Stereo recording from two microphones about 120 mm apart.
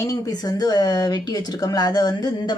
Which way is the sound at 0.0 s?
30° left (ahead or behind).